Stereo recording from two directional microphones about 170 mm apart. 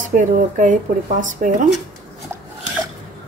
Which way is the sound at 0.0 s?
50° right (ahead or behind).